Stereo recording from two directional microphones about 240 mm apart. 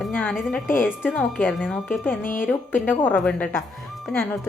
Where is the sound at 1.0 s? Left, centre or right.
Centre.